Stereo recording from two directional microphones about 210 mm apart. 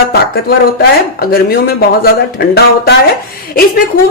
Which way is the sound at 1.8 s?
50° left (ahead or behind).